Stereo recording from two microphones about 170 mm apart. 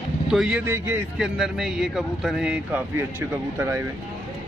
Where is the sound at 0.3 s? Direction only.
5° right (ahead or behind).